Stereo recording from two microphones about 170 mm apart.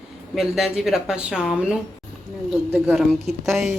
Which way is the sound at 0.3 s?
Centre (ahead or behind).